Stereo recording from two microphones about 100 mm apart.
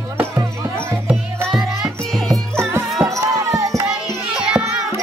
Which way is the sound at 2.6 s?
25° right (ahead or behind).